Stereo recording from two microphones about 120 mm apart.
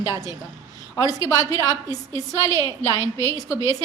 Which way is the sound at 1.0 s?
25° left (ahead or behind).